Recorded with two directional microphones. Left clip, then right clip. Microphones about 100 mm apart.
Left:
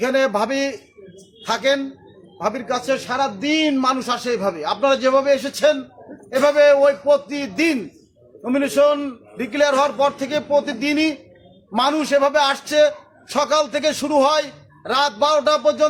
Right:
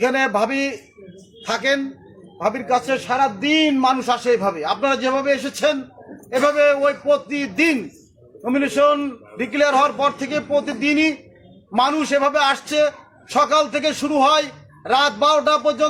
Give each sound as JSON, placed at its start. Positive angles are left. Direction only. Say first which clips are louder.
{"t": 0.3, "sound": "a man's voice", "louder": "right 1 dB", "side_deg": 25}